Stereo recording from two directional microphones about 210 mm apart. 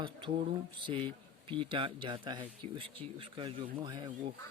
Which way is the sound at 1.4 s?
25° right (ahead or behind).